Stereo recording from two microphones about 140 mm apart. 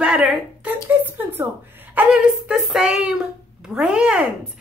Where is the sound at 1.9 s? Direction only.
10° right (ahead or behind).